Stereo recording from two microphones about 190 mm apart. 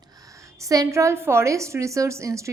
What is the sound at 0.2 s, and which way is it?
A woman's voice, 15° right (ahead or behind).